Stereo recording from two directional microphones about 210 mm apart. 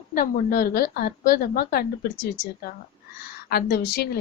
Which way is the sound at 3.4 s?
50° left (ahead or behind).